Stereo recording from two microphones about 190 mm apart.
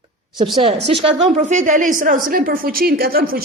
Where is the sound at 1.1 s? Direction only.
35° right (ahead or behind).